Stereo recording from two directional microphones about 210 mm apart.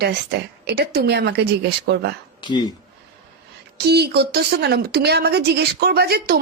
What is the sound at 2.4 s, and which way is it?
Speech, 20° left (ahead or behind).